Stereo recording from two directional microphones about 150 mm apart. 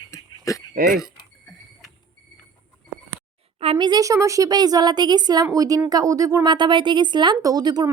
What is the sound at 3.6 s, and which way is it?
Speech, 35° right (ahead or behind).